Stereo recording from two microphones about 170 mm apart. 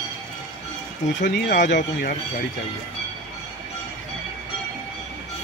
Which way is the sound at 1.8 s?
65° left (ahead or behind).